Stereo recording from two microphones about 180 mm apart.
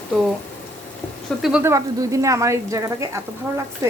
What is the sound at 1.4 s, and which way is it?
Speech, 5° right (ahead or behind).